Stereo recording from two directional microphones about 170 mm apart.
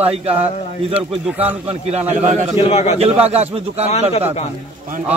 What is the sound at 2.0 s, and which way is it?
Speech, 10° right (ahead or behind).